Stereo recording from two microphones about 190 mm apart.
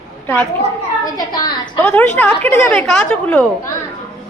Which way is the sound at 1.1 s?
20° left (ahead or behind).